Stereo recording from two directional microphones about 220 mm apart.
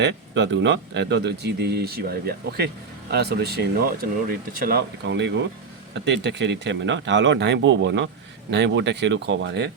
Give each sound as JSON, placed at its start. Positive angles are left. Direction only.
{"t": 0.0, "sound": "speech", "side_deg": -55}